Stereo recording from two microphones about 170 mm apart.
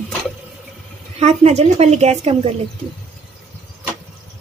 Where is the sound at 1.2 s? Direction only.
40° right (ahead or behind).